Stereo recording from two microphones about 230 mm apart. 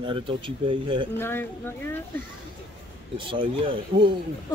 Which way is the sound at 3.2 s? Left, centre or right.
Right.